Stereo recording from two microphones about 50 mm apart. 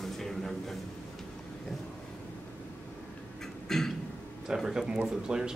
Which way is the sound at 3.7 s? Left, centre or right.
Centre.